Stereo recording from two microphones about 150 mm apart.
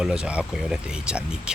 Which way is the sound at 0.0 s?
5° right (ahead or behind).